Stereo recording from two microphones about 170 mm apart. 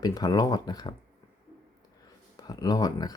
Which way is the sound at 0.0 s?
20° left (ahead or behind).